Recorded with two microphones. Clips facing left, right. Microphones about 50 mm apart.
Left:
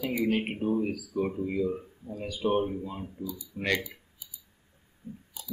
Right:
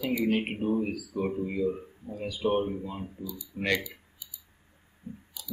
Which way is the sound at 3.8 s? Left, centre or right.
Left.